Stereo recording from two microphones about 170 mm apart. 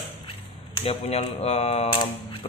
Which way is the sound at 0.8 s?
40° left (ahead or behind).